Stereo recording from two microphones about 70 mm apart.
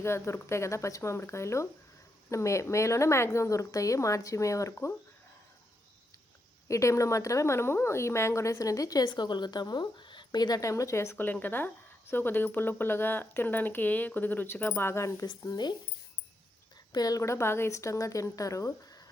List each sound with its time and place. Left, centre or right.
0.0 s a woman's voice: left
6.7 s a woman's voice: left
10.6 s speech: left
15.3 s speech: left
16.9 s a woman's voice: left
17.2 s a woman's voice: left